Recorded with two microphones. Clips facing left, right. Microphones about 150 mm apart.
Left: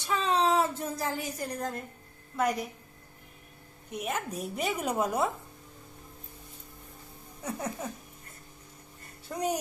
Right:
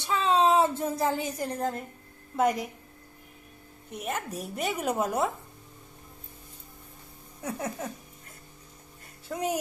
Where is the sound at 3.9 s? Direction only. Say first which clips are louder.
Even; 5° right (ahead or behind).